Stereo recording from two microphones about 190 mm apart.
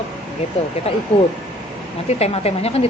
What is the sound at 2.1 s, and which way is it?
Speech, 35° left (ahead or behind).